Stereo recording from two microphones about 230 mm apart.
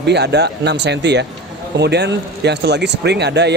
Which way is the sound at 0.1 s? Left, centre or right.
Right.